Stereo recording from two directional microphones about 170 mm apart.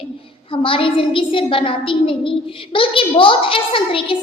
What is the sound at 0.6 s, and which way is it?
A woman's voice, 30° left (ahead or behind).